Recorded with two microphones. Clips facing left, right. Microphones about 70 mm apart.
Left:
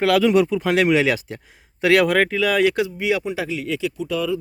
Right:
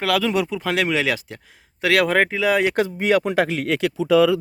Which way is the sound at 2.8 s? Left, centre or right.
Right.